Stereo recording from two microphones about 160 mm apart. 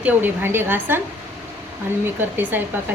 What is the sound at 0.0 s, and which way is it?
A woman's voice, 15° right (ahead or behind).